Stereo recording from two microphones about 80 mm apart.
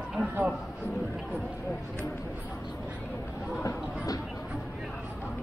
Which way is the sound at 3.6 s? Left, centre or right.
Left.